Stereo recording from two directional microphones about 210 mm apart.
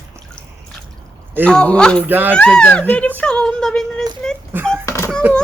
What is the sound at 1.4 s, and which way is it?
Speech, 5° left (ahead or behind).